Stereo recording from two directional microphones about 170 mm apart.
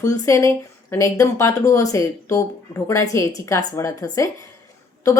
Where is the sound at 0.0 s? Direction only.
20° left (ahead or behind).